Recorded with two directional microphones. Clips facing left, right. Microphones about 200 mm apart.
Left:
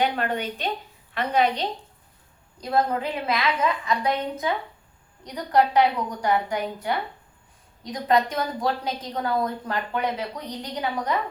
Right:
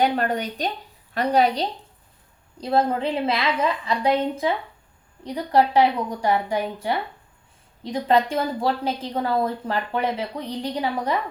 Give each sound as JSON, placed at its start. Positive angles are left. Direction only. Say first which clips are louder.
{"t": 0.0, "sound": "a woman's voice", "louder": "right 3 dB", "side_deg": -40}